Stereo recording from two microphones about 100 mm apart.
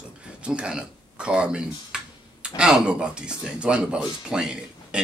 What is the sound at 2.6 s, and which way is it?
Speech, 10° right (ahead or behind).